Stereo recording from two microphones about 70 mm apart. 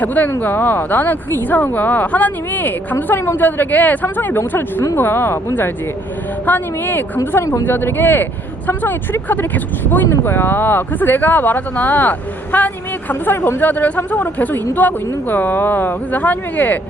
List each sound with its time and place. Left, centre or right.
0.0 s speech: left
6.4 s speech: left